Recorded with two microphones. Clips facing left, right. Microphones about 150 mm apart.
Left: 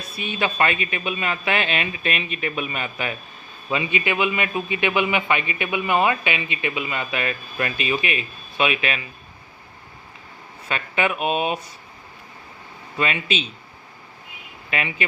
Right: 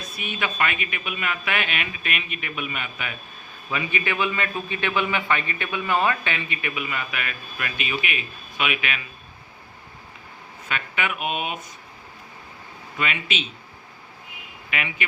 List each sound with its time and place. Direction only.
0.2 s speech: 30° left (ahead or behind)
3.7 s a man's voice: 20° left (ahead or behind)
10.7 s speech: 35° left (ahead or behind)
13.0 s speech: 35° left (ahead or behind)
14.7 s speech: 35° left (ahead or behind)